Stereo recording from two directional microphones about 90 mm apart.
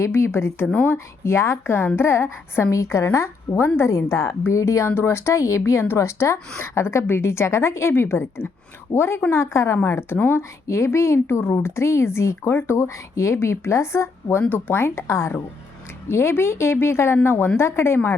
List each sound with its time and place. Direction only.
0.0 s a woman's voice: 30° left (ahead or behind)
0.9 s a woman's voice: 30° left (ahead or behind)